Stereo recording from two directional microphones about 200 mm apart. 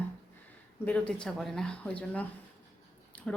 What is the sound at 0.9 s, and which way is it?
Speech, 5° left (ahead or behind).